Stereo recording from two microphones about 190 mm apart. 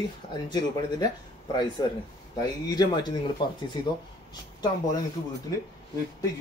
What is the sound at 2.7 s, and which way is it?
Speech, 20° left (ahead or behind).